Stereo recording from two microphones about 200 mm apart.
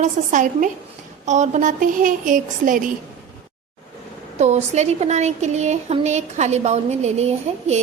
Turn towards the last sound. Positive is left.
turn(degrees=-35)  # may be behind; listen again after turning